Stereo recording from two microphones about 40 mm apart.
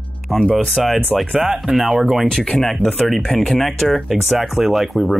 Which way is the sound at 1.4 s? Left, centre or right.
Centre.